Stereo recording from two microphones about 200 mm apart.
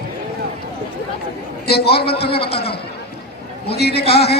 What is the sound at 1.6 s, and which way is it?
Speech, 50° left (ahead or behind).